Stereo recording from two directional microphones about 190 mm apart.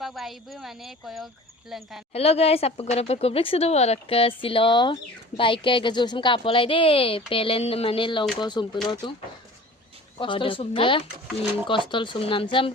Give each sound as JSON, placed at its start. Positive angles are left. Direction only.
{"t": 0.0, "sound": "speech", "side_deg": 0}
{"t": 2.1, "sound": "a woman's voice", "side_deg": 30}
{"t": 10.2, "sound": "a woman's voice", "side_deg": 25}